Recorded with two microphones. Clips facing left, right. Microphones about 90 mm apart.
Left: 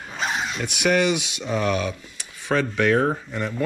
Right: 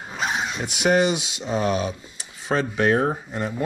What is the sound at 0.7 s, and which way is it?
Speech, 25° right (ahead or behind).